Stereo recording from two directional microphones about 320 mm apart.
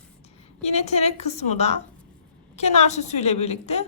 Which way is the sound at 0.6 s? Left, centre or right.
Centre.